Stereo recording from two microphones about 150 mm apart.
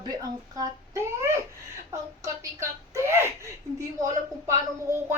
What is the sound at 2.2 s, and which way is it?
A woman's voice, 20° right (ahead or behind).